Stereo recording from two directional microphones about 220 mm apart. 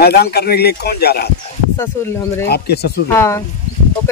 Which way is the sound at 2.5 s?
45° left (ahead or behind).